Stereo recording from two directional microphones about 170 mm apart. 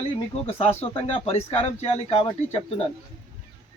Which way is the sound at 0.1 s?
35° left (ahead or behind).